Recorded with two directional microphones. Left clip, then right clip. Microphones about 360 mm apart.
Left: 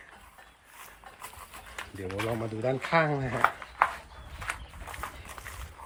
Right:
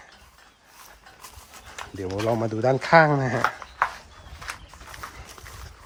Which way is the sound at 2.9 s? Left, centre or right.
Right.